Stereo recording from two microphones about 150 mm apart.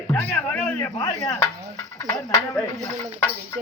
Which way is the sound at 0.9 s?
25° left (ahead or behind).